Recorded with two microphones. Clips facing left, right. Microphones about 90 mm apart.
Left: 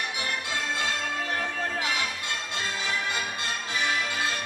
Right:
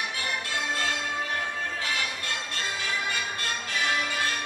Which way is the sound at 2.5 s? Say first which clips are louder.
Left 2 dB; 20° left (ahead or behind).